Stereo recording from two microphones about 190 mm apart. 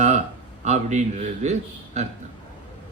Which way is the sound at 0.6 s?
35° right (ahead or behind).